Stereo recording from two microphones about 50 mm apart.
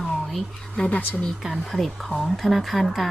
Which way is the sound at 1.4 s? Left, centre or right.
Centre.